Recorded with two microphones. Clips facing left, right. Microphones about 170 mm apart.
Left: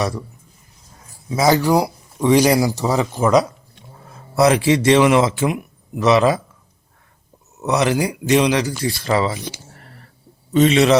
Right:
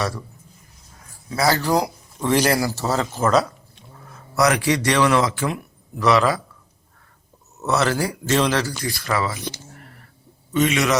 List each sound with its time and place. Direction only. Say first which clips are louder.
1.3 s speech: left 4 dB; 20° left (ahead or behind)
4.0 s speech: left 4 dB; 25° left (ahead or behind)
7.6 s speech: left 3 dB; 15° left (ahead or behind)
8.8 s speech: left 5 dB; 25° left (ahead or behind)
10.5 s speech: left 6 dB; 30° left (ahead or behind)